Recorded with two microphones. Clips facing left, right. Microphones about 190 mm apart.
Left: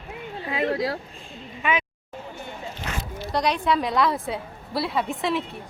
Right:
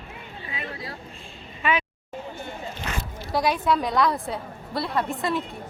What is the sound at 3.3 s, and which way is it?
Speech, 5° right (ahead or behind).